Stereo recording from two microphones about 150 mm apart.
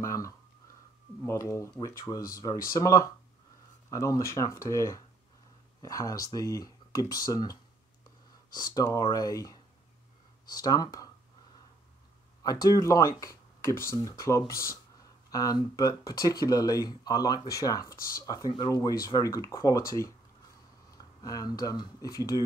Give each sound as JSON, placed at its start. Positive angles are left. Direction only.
{"t": 0.0, "sound": "a sound", "side_deg": 20}
{"t": 1.2, "sound": "speech", "side_deg": 20}
{"t": 8.5, "sound": "speech", "side_deg": 25}
{"t": 12.4, "sound": "speech", "side_deg": 25}
{"t": 21.0, "sound": "speech", "side_deg": 25}